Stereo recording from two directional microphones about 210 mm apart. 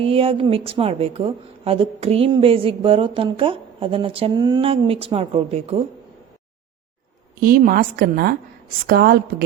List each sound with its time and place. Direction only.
0.0 s a woman's voice: 25° right (ahead or behind)
7.3 s a woman's voice: 45° right (ahead or behind)